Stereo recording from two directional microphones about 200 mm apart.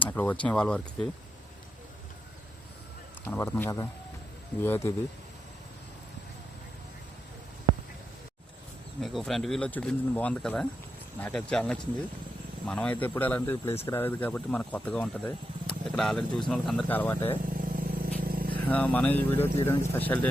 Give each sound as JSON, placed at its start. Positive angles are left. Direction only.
{"t": 0.0, "sound": "speech", "side_deg": 5}
{"t": 3.2, "sound": "speech", "side_deg": 10}
{"t": 9.0, "sound": "speech", "side_deg": 0}
{"t": 17.5, "sound": "vehicle", "side_deg": -45}
{"t": 18.5, "sound": "speech", "side_deg": 5}